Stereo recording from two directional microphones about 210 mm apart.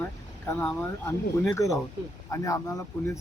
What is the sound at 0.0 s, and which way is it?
Speech, 10° left (ahead or behind).